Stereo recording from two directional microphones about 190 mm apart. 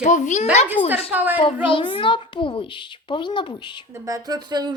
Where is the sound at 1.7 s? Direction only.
25° left (ahead or behind).